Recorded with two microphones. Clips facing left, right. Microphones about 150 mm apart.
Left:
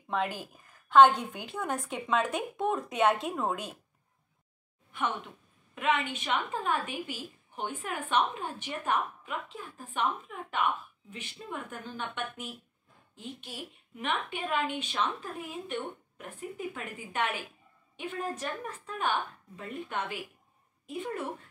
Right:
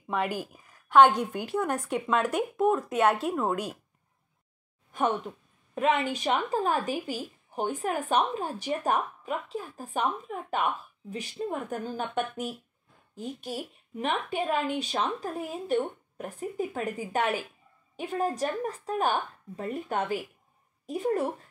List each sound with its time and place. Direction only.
0.1 s a woman's voice: 10° right (ahead or behind)
4.9 s a woman's voice: 40° right (ahead or behind)